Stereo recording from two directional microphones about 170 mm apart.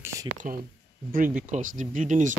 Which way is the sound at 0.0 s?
20° right (ahead or behind).